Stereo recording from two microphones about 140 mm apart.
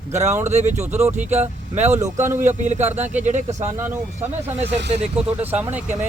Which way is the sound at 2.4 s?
60° right (ahead or behind).